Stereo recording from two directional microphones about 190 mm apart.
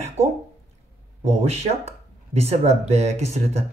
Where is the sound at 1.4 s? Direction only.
35° right (ahead or behind).